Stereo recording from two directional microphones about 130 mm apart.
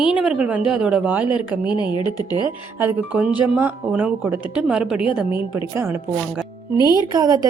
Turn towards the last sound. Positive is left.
turn(degrees=-30)  # may be behind; listen again after turning